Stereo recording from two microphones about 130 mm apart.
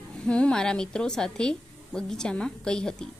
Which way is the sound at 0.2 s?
5° left (ahead or behind).